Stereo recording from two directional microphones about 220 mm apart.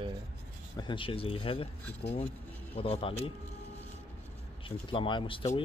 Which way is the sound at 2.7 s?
25° left (ahead or behind).